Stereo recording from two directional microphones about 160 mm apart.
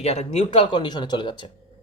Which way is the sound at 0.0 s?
40° left (ahead or behind).